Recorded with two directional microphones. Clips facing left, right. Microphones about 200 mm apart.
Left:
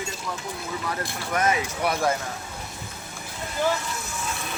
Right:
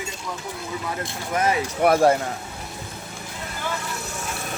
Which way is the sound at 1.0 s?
25° right (ahead or behind).